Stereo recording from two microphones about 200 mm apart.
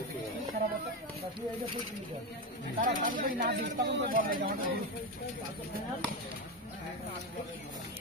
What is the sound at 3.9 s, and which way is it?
Speech, 60° right (ahead or behind).